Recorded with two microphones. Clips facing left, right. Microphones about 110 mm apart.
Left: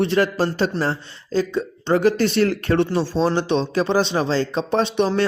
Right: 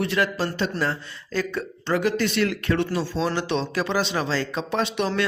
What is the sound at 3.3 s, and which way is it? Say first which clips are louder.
Speech: left 5 dB; 25° left (ahead or behind).